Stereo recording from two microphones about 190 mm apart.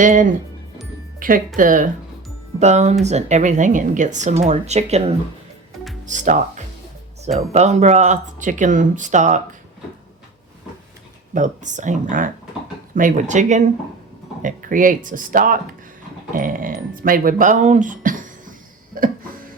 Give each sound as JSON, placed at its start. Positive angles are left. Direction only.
{"t": 0.0, "sound": "speech", "side_deg": -45}
{"t": 1.5, "sound": "speech", "side_deg": -45}
{"t": 11.3, "sound": "speech", "side_deg": -40}